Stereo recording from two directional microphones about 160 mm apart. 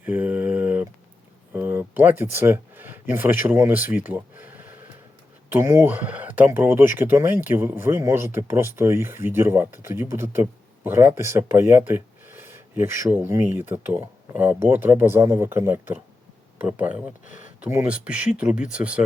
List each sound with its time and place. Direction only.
0.0 s a sound: 10° right (ahead or behind)
1.5 s speech: 10° right (ahead or behind)
17.2 s speech: 50° left (ahead or behind)
17.6 s speech: 10° right (ahead or behind)